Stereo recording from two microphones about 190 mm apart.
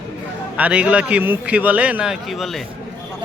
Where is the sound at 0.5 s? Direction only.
5° right (ahead or behind).